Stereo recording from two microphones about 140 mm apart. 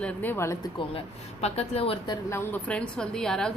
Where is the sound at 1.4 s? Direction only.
45° left (ahead or behind).